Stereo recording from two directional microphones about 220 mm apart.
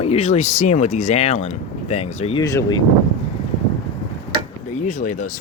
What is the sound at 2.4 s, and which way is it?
Speech, 15° left (ahead or behind).